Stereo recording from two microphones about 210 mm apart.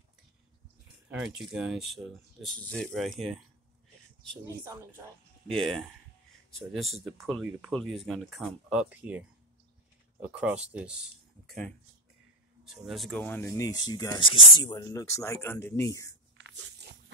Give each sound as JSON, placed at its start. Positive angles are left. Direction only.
{"t": 1.2, "sound": "speech", "side_deg": 0}
{"t": 10.2, "sound": "speech", "side_deg": -5}